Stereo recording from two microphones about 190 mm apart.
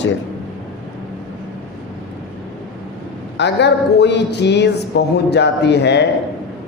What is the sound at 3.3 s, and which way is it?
Speech, 65° left (ahead or behind).